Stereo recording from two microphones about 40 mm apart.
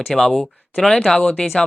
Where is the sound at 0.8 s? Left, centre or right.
Left.